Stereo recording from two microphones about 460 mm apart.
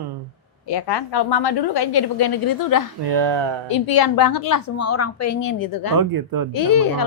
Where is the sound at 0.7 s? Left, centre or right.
Left.